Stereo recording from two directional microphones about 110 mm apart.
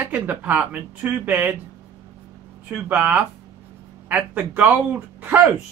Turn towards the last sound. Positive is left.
turn(degrees=-15)  # may be behind; listen again after turning